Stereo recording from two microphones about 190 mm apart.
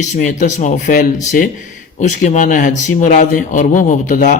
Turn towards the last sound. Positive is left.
turn(degrees=40)  # may be behind; listen again after turning